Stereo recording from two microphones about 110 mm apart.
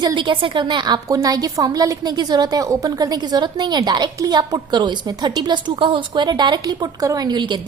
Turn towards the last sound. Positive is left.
turn(degrees=-45)  # may be behind; listen again after turning